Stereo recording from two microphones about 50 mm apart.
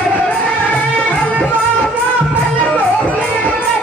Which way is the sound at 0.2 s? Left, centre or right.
Left.